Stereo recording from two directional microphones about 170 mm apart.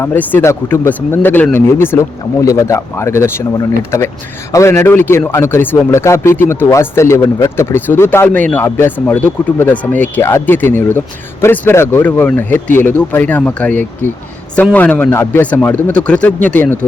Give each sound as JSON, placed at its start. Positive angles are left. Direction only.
{"t": 0.0, "sound": "speech", "side_deg": 10}